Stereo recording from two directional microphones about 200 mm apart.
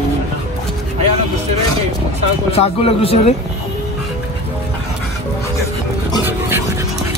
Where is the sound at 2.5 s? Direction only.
30° left (ahead or behind).